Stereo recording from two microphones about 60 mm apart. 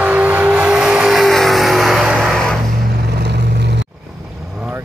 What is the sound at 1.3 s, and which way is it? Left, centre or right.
Music, centre.